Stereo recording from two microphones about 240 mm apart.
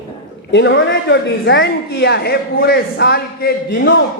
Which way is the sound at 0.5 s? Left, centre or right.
Left.